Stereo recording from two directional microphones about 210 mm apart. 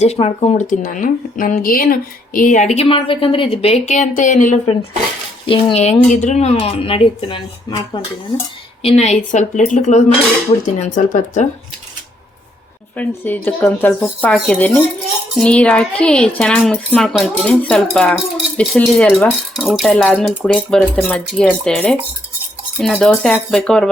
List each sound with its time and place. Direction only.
0.0 s speech: 30° left (ahead or behind)
13.0 s speech: 10° left (ahead or behind)